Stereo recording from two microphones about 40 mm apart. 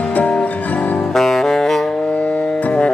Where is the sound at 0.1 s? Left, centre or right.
Left.